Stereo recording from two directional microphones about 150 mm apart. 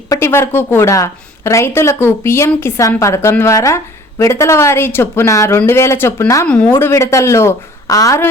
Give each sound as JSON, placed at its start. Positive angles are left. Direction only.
{"t": 0.1, "sound": "a woman's voice", "side_deg": 15}